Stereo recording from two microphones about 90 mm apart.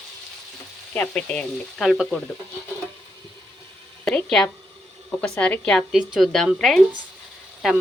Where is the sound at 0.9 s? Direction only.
15° left (ahead or behind).